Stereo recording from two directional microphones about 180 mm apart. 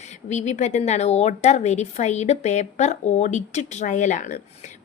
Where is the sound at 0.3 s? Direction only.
40° left (ahead or behind).